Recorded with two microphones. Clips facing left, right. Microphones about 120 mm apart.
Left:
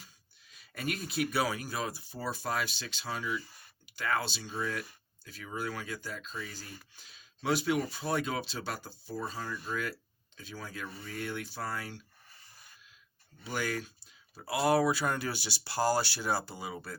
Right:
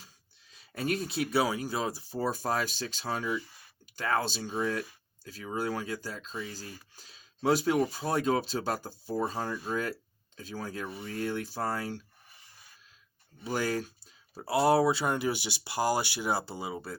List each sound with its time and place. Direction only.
0.5 s speech: 30° right (ahead or behind)
4.5 s speech: 30° right (ahead or behind)
10.8 s speech: 15° right (ahead or behind)
11.1 s speech: 35° right (ahead or behind)
13.4 s speech: 35° right (ahead or behind)